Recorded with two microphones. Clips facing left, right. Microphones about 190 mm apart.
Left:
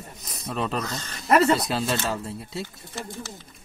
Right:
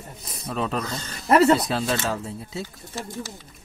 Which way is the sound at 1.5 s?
Centre (ahead or behind).